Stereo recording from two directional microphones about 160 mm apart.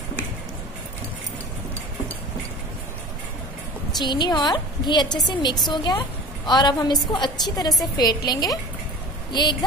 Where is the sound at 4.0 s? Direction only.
25° left (ahead or behind).